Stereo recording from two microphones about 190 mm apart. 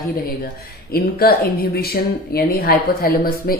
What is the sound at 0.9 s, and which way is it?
Speech, 55° left (ahead or behind).